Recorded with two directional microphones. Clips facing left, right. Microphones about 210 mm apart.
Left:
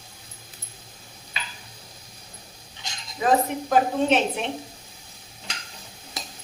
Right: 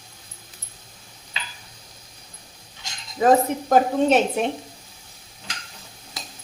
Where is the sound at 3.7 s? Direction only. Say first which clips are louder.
Right 3 dB; 45° right (ahead or behind).